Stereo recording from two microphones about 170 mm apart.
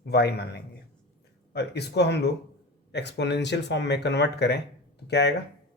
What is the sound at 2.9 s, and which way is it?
Speech, 90° left.